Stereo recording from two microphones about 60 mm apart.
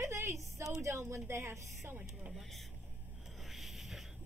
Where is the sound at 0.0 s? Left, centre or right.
Right.